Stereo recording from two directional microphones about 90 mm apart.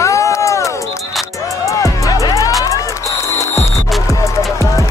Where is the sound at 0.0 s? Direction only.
35° left (ahead or behind).